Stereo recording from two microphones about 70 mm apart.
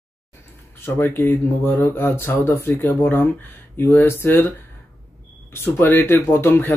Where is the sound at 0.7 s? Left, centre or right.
Left.